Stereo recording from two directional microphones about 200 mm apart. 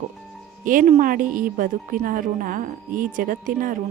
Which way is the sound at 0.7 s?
40° right (ahead or behind).